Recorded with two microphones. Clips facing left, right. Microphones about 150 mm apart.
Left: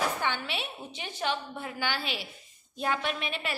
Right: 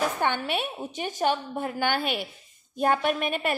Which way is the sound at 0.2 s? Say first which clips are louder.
Right 6 dB; 50° right (ahead or behind).